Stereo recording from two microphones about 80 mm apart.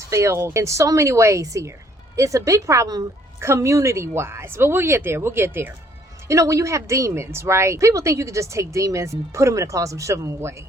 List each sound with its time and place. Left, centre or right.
0.1 s a woman's voice: right
6.2 s a woman's voice: right